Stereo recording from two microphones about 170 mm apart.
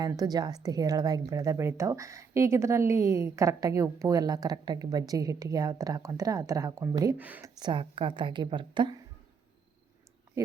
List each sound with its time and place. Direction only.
0.0 s a woman's voice: 20° right (ahead or behind)
7.6 s a woman's voice: 30° right (ahead or behind)